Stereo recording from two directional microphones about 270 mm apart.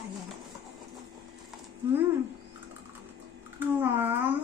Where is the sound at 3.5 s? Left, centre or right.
Centre.